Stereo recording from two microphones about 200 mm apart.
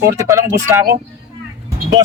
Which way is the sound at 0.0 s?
15° right (ahead or behind).